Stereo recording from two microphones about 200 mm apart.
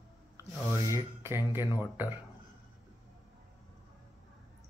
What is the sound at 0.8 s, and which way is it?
Speech, 15° right (ahead or behind).